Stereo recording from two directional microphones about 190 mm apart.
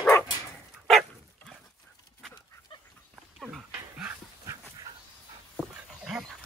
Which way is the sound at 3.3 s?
5° right (ahead or behind).